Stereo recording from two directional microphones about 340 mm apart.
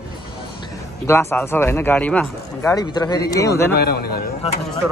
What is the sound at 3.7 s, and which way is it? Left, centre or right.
Speech, left.